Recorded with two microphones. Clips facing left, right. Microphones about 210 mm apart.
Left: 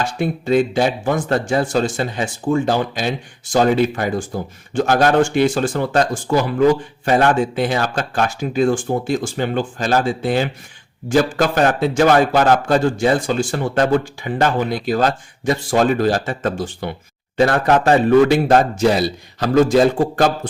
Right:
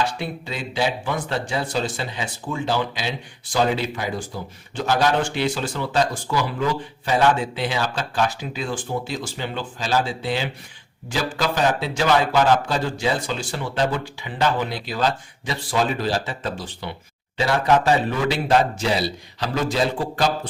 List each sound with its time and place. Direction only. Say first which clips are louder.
0.0 s speech: left 5 dB; 50° left (ahead or behind)